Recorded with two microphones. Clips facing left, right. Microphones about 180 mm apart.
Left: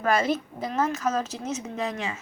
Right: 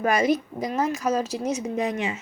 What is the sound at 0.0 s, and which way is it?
A woman's voice, 15° right (ahead or behind).